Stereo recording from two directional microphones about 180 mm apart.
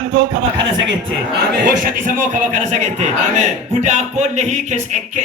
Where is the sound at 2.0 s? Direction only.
45° right (ahead or behind).